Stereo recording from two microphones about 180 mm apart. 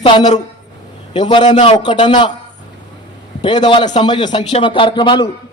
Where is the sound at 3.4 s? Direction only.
25° left (ahead or behind).